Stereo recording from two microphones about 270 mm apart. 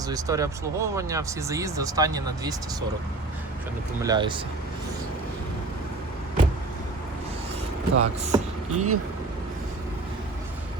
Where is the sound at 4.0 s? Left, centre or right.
Centre.